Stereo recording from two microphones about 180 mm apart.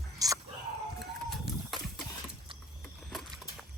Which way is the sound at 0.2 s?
20° right (ahead or behind).